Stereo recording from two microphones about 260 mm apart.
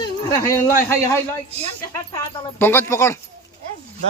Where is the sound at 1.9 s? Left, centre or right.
Centre.